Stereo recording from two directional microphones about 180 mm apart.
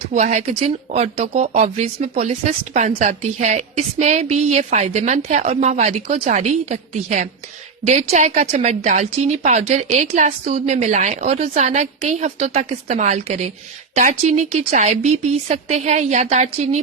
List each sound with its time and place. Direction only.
0.1 s speech: 45° right (ahead or behind)